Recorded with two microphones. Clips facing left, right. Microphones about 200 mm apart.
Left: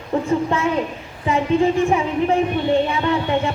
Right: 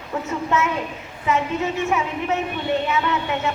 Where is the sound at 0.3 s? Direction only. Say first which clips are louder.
Left 1 dB; 30° left (ahead or behind).